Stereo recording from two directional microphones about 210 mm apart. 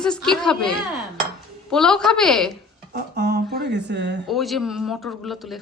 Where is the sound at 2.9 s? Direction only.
50° right (ahead or behind).